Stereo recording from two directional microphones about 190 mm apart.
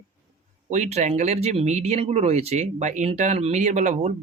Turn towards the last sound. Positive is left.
turn(degrees=-40)  # may be behind; listen again after turning